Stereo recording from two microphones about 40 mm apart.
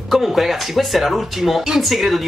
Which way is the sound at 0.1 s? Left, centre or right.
Centre.